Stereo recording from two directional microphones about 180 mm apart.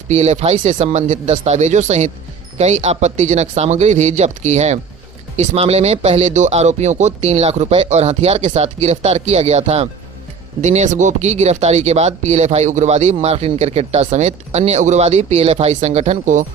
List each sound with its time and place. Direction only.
0.1 s speech: 40° right (ahead or behind)